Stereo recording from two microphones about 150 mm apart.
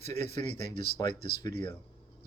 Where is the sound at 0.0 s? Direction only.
45° right (ahead or behind).